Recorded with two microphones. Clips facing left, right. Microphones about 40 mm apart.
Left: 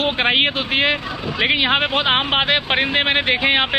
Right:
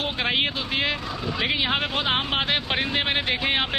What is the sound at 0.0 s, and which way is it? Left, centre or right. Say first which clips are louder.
Speech: left 7 dB; left.